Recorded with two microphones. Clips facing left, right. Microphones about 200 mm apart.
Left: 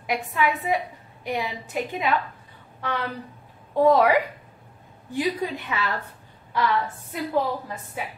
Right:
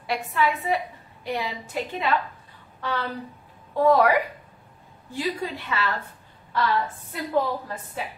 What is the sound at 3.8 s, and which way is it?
Speech, 20° left (ahead or behind).